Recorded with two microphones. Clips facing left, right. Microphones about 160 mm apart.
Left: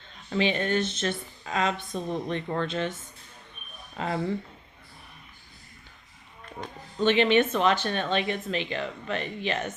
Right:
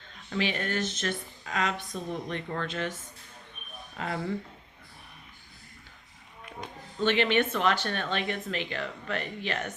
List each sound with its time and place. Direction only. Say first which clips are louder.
0.3 s speech: left 5 dB; 25° left (ahead or behind)
3.9 s speech: left 4 dB; 25° left (ahead or behind)
7.0 s speech: left 4 dB; 20° left (ahead or behind)